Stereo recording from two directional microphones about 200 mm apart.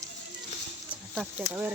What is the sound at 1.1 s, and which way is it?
Speech, 5° right (ahead or behind).